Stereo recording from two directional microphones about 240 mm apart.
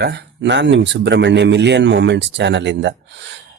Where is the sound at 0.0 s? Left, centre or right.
Right.